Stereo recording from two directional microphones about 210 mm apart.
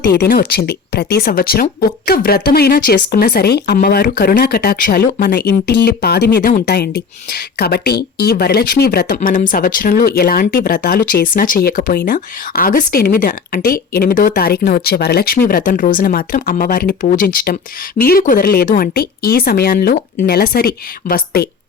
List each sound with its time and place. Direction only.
0.2 s speech: 45° left (ahead or behind)